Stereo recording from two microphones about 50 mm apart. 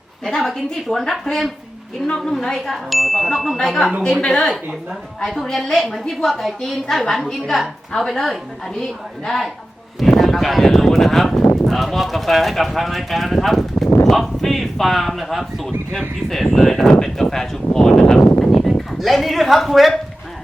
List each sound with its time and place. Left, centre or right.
0.3 s speech: centre
2.6 s speech: centre
4.2 s speech: centre
18.7 s speech: centre